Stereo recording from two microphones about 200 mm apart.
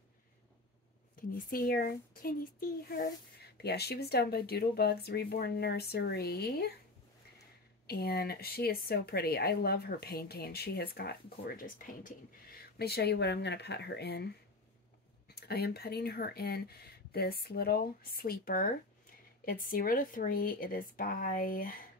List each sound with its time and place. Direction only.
1.5 s speech: 45° left (ahead or behind)
7.8 s speech: 50° left (ahead or behind)